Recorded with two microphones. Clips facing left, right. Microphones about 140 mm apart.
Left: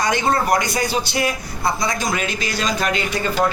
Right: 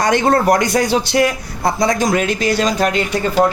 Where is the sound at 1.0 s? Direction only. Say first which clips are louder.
Right 8 dB; 90° right.